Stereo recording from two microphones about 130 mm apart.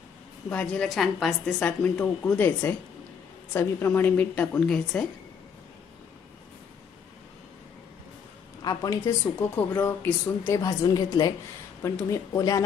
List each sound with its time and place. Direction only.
0.5 s a woman's voice: 10° left (ahead or behind)
8.6 s speech: 25° left (ahead or behind)
9.2 s a woman's voice: 15° left (ahead or behind)
10.6 s speech: 30° left (ahead or behind)